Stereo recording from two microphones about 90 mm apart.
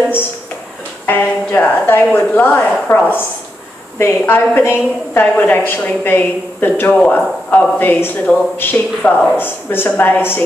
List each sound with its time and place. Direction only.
1.0 s a woman's voice: 25° left (ahead or behind)